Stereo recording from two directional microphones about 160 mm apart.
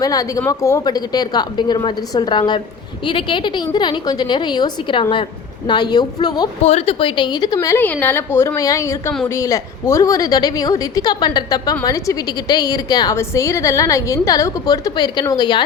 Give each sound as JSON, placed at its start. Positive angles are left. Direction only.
{"t": 0.0, "sound": "a woman's voice", "side_deg": 20}
{"t": 6.6, "sound": "a woman's voice", "side_deg": 40}